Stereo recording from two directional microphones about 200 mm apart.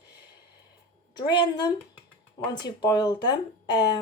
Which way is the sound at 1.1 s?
20° left (ahead or behind).